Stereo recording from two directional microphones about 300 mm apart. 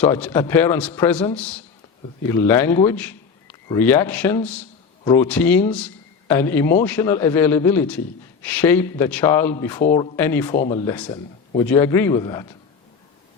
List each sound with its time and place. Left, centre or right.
0.0 s a man's voice: centre